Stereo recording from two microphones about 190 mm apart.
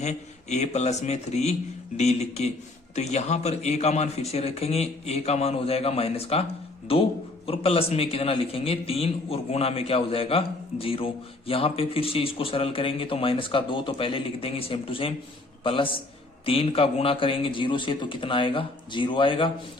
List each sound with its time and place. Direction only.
0.0 s a man's voice: 35° left (ahead or behind)